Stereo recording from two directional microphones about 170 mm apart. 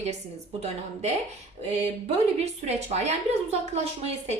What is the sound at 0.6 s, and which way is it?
Speech, 40° right (ahead or behind).